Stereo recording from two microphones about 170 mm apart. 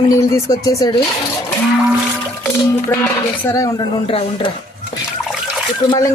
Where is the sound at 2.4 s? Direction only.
10° left (ahead or behind); by 4.4 s 30° left (ahead or behind).